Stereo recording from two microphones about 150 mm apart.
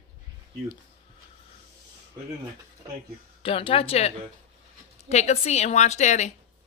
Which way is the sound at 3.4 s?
35° left (ahead or behind).